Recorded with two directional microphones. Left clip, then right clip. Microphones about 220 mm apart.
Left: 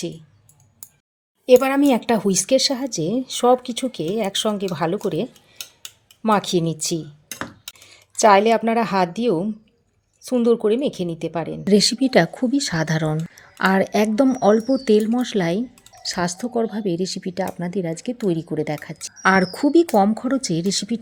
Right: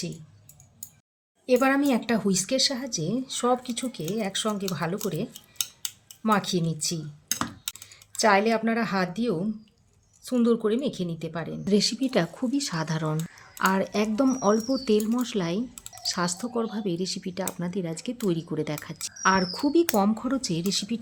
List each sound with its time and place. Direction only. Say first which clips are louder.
1.5 s speech: left 7 dB; 35° left (ahead or behind)
8.1 s speech: left 8 dB; 30° left (ahead or behind); by 19.1 s 15° left (ahead or behind)
19.2 s speech: left 6 dB; 25° left (ahead or behind)